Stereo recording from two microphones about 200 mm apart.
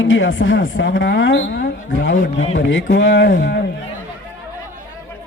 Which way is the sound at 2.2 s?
35° left (ahead or behind).